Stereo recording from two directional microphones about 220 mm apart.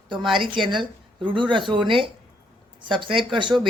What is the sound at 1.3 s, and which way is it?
Speech, 20° right (ahead or behind).